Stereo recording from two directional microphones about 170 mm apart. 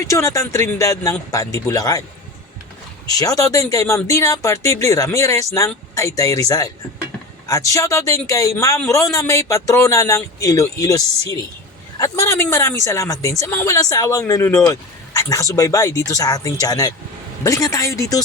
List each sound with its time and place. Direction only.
0.1 s a man's voice: 20° left (ahead or behind)
3.1 s a man's voice: 20° left (ahead or behind)